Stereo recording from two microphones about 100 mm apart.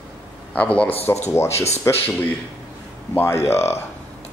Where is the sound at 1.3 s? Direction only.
25° left (ahead or behind).